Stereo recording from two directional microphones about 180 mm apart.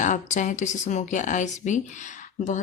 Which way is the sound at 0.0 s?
45° left (ahead or behind).